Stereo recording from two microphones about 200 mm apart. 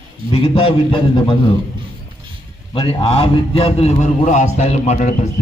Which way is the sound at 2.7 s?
25° left (ahead or behind).